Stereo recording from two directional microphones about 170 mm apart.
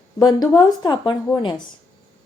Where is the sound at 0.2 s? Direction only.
25° left (ahead or behind).